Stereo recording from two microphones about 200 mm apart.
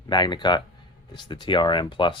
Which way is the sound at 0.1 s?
20° left (ahead or behind).